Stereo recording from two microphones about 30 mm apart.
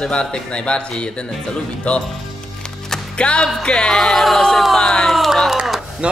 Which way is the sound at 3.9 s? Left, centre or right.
Centre.